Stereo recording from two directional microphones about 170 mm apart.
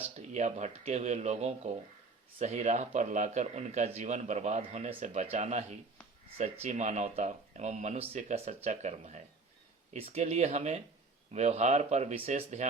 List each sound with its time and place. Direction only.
0.2 s a man's voice: 40° right (ahead or behind)